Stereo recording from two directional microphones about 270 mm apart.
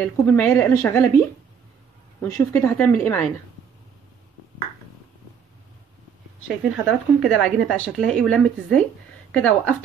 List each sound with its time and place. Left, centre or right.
0.0 s a woman's voice: centre
2.2 s a woman's voice: centre
6.4 s speech: centre